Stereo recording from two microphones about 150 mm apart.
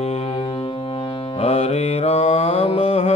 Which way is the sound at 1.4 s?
40° left (ahead or behind).